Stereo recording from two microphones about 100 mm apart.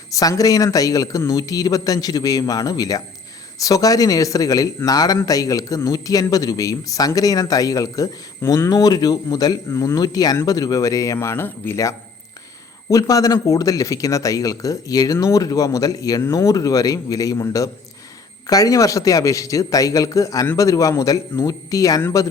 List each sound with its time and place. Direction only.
0.1 s a man's voice: 35° left (ahead or behind)